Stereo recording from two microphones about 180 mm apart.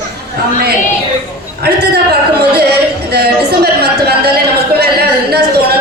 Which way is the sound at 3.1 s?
60° right (ahead or behind).